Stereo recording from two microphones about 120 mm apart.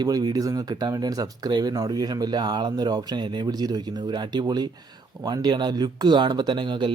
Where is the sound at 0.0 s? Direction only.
35° right (ahead or behind).